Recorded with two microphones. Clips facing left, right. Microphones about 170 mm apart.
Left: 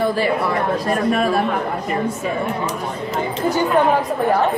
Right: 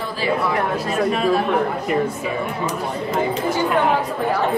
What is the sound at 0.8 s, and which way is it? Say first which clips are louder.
Speech: left 1 dB; 50° left (ahead or behind).